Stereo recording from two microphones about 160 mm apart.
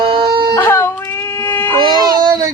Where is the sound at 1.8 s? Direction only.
25° right (ahead or behind).